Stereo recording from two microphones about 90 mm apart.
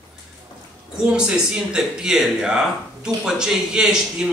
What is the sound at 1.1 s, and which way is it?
Speech, 10° right (ahead or behind).